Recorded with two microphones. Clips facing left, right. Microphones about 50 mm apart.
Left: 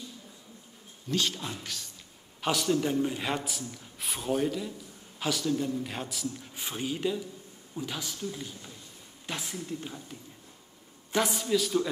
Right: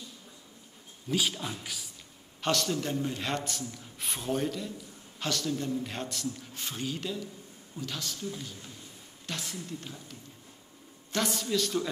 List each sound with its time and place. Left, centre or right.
1.1 s speech: centre
2.4 s a man's voice: centre
11.1 s a man's voice: centre